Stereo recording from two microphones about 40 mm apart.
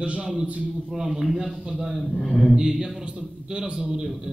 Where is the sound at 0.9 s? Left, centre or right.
Centre.